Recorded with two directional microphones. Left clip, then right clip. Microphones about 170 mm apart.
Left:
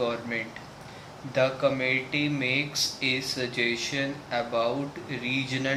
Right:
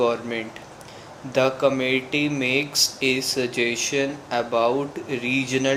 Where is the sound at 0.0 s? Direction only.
40° right (ahead or behind).